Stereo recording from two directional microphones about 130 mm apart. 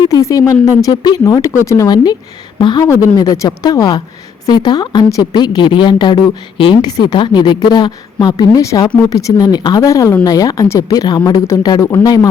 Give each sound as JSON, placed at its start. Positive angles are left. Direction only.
{"t": 0.0, "sound": "a woman's voice", "side_deg": 25}
{"t": 2.8, "sound": "a woman's voice", "side_deg": 25}
{"t": 6.9, "sound": "a woman's voice", "side_deg": 35}